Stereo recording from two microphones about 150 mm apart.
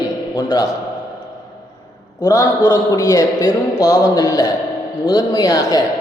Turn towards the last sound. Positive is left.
turn(degrees=25)  # may be behind; listen again after turning